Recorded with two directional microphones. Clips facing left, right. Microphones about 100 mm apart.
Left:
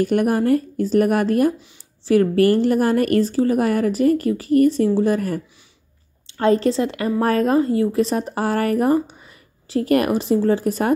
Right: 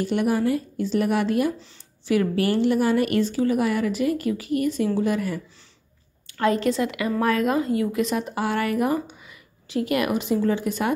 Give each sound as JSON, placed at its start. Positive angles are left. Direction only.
{"t": 0.0, "sound": "a woman's voice", "side_deg": 50}
{"t": 6.2, "sound": "a woman's voice", "side_deg": 30}